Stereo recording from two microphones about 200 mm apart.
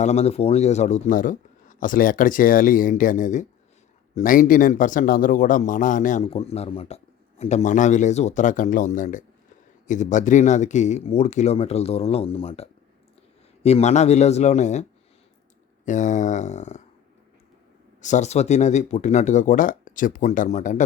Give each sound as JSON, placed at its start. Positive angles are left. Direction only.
{"t": 0.0, "sound": "speech", "side_deg": 35}
{"t": 18.0, "sound": "speech", "side_deg": 35}